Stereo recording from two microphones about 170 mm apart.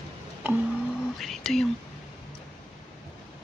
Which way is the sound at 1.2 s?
Centre (ahead or behind).